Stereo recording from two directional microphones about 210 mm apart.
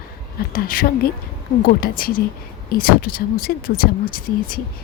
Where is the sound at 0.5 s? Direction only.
45° left (ahead or behind).